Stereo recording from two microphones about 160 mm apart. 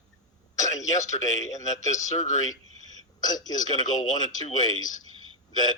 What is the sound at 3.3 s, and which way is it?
Speech, 25° left (ahead or behind).